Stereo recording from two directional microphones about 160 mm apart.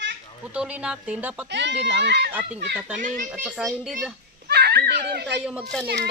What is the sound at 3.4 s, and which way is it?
Speech, 5° right (ahead or behind).